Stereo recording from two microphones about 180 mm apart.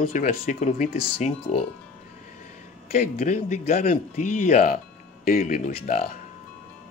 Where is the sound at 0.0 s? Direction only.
55° left (ahead or behind).